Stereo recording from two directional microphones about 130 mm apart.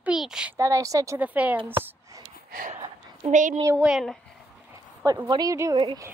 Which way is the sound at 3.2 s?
65° right (ahead or behind).